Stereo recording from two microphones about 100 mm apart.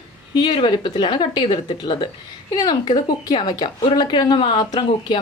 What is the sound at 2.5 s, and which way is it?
Speech, 45° left (ahead or behind).